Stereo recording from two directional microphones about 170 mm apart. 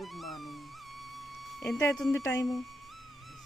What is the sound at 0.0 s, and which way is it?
Music, centre (ahead or behind).